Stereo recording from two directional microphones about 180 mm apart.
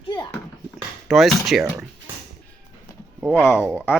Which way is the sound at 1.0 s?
Centre (ahead or behind).